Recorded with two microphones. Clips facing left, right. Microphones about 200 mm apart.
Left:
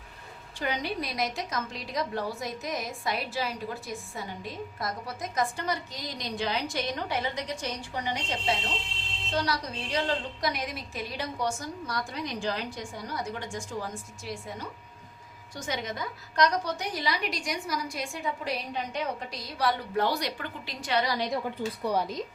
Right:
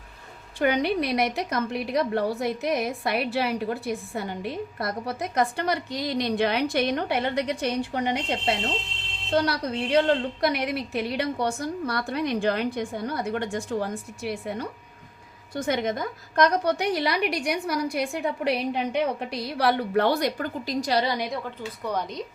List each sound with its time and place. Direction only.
0.6 s a woman's voice: 65° right (ahead or behind); by 21.1 s 35° right (ahead or behind)
21.8 s speech: 5° left (ahead or behind)